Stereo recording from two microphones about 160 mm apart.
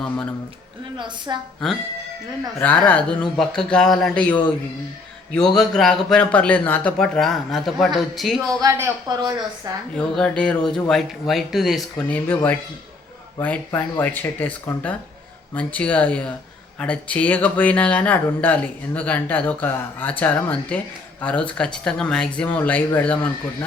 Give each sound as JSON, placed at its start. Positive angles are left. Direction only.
{"t": 0.0, "sound": "speech", "side_deg": 5}
{"t": 0.9, "sound": "speech", "side_deg": -30}
{"t": 2.6, "sound": "speech", "side_deg": 10}
{"t": 5.5, "sound": "speech", "side_deg": 0}
{"t": 8.6, "sound": "speech", "side_deg": -25}
{"t": 10.0, "sound": "speech", "side_deg": 5}